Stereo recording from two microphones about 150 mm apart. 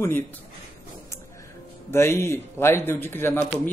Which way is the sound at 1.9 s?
15° left (ahead or behind).